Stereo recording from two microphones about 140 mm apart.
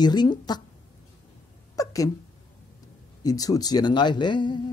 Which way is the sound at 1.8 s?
25° left (ahead or behind).